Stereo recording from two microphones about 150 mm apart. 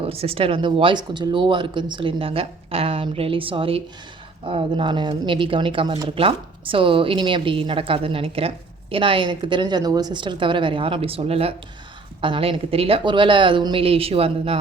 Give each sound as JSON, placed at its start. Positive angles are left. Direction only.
{"t": 0.0, "sound": "speech", "side_deg": -40}